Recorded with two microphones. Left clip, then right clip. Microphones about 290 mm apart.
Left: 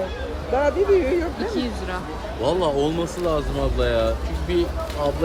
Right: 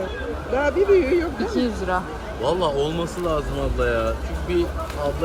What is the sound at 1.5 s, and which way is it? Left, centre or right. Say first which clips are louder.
Speech: right 4 dB; centre.